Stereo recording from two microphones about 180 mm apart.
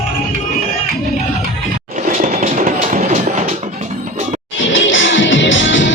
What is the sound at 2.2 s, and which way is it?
Train, 45° right (ahead or behind).